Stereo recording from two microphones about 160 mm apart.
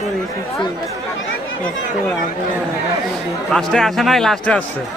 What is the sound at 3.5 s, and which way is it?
Speech, centre (ahead or behind).